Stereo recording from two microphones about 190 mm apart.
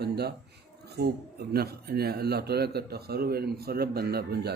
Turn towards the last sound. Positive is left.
turn(degrees=-55)  # may be behind; listen again after turning